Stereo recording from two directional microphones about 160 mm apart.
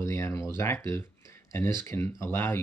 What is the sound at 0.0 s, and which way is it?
Speech, 20° left (ahead or behind).